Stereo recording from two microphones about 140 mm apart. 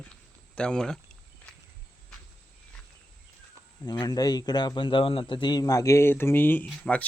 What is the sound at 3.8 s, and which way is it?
A man's voice, 30° left (ahead or behind).